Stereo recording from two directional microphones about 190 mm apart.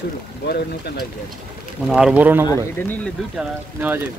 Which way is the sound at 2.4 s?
10° left (ahead or behind).